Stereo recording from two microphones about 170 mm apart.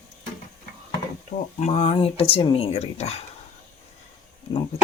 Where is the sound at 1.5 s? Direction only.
40° left (ahead or behind).